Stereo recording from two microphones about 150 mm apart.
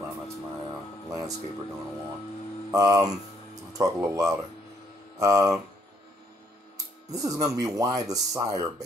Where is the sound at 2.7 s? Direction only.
20° right (ahead or behind).